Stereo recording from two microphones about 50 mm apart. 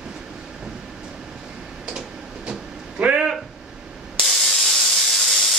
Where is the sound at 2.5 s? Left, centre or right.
Centre.